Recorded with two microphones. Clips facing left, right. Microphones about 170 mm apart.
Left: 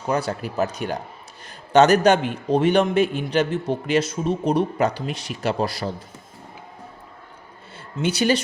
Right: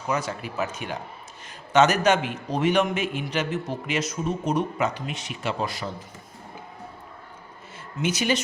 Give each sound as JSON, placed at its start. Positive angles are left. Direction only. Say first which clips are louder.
{"t": 0.1, "sound": "a man's voice", "louder": "left 4 dB", "side_deg": 35}
{"t": 7.9, "sound": "a man's voice", "louder": "left 4 dB", "side_deg": 35}